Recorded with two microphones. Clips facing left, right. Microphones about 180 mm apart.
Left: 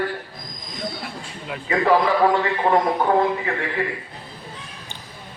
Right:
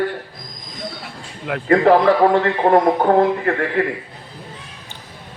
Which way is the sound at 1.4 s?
65° right (ahead or behind).